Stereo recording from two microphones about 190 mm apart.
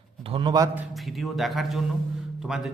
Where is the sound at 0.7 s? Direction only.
5° right (ahead or behind).